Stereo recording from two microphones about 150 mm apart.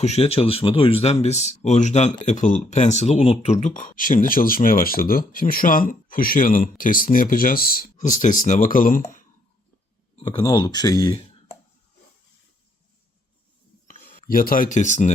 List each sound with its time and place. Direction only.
0.0 s speech: 45° left (ahead or behind); by 9.0 s 65° left (ahead or behind)
10.4 s speech: 30° left (ahead or behind)
13.8 s speech: 70° left (ahead or behind)